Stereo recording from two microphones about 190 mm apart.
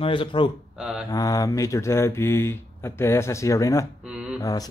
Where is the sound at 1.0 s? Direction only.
20° left (ahead or behind).